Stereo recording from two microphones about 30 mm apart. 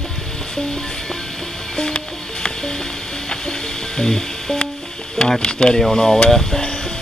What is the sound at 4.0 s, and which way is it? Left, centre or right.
Music, left.